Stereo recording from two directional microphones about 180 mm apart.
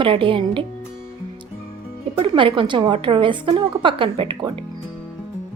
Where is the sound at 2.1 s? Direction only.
30° right (ahead or behind).